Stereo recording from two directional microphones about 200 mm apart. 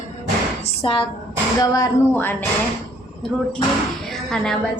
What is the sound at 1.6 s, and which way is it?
Speech, 20° left (ahead or behind).